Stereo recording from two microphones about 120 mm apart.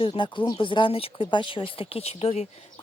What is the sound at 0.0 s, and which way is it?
A woman's voice, 45° left (ahead or behind).